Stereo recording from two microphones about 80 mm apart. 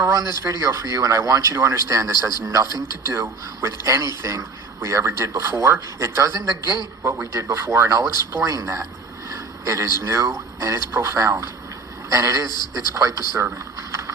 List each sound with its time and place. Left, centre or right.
0.1 s speech: right